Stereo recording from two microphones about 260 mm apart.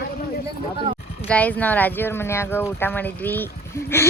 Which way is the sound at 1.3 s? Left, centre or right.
Centre.